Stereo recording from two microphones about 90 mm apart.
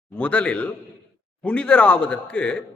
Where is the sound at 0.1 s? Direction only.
15° left (ahead or behind).